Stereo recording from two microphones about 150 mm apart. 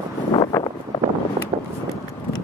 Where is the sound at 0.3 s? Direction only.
25° left (ahead or behind).